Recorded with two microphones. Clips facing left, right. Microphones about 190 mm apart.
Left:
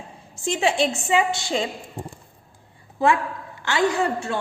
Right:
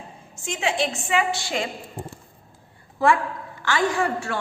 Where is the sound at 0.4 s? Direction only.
30° left (ahead or behind).